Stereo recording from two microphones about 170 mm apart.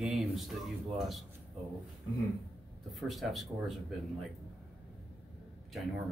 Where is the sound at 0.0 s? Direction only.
Centre (ahead or behind).